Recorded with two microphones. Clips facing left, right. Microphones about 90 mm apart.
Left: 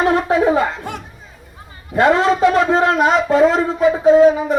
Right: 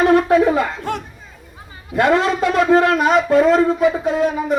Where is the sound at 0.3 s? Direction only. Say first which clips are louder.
Even; 20° left (ahead or behind).